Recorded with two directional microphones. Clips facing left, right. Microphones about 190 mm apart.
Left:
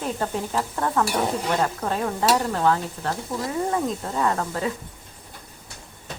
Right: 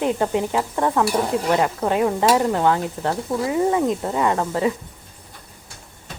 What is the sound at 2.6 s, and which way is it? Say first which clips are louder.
Speech: right 3 dB; 25° right (ahead or behind).